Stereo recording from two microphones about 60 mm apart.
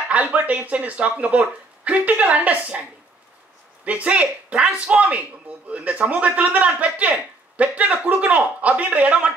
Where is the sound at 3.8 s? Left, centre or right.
Right.